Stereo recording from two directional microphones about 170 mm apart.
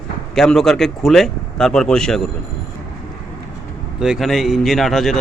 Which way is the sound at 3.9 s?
5° right (ahead or behind).